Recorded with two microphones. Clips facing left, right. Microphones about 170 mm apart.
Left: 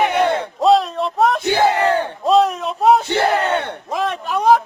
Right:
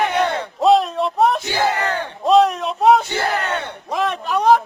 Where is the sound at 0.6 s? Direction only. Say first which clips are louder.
Even; centre (ahead or behind).